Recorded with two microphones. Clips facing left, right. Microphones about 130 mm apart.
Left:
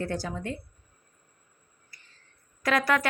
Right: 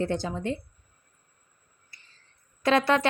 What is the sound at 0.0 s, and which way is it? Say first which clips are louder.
Speech: right 4 dB; 20° right (ahead or behind).